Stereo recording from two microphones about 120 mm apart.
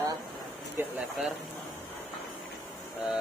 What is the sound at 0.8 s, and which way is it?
Speech, 15° right (ahead or behind).